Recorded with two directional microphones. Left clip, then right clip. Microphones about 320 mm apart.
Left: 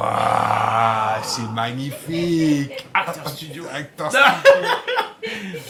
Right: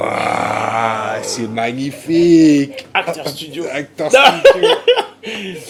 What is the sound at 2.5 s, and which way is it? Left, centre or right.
Speech, left.